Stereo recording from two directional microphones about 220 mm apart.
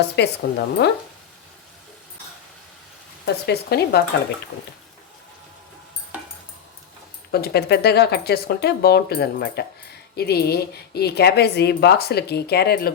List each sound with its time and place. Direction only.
0.0 s a woman's voice: 50° left (ahead or behind)
3.4 s a woman's voice: 45° left (ahead or behind)
6.1 s a sound: 5° right (ahead or behind)
7.3 s a woman's voice: 45° left (ahead or behind)